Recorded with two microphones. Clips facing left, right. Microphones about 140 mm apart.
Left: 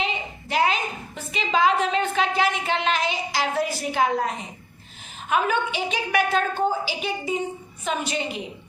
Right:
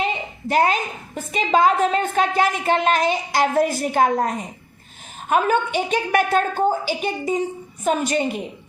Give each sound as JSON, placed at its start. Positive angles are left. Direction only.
{"t": 0.0, "sound": "a woman's voice", "side_deg": -45}